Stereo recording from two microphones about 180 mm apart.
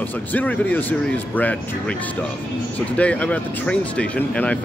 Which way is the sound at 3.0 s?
5° left (ahead or behind).